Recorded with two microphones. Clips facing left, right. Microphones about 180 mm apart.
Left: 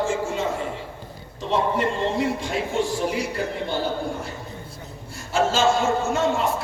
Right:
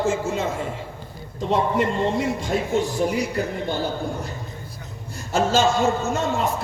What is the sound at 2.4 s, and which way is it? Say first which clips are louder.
Speech: right 2 dB; 40° right (ahead or behind).